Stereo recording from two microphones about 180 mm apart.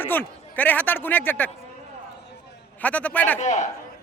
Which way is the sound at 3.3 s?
40° left (ahead or behind).